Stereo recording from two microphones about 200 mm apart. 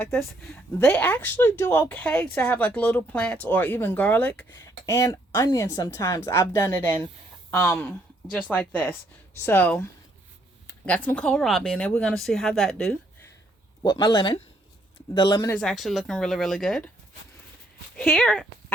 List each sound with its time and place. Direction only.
0.5 s speech: 10° left (ahead or behind)
13.9 s speech: 25° left (ahead or behind)
15.4 s speech: 5° left (ahead or behind)
17.9 s speech: 5° left (ahead or behind)